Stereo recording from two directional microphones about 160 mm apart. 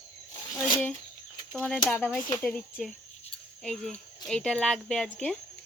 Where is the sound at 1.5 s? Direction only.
5° left (ahead or behind).